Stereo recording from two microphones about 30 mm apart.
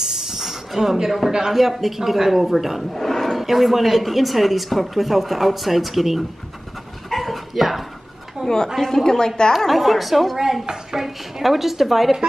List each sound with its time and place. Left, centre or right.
0.0 s hiss: centre
1.5 s a man's voice: centre
2.9 s speech: centre
3.3 s speech: centre
7.1 s dog: centre
8.4 s speech: right
8.7 s a woman's voice: centre
9.7 s speech: centre
10.6 s speech: centre
11.0 s speech: centre